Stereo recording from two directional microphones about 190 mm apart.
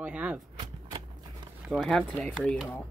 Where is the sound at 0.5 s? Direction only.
20° right (ahead or behind).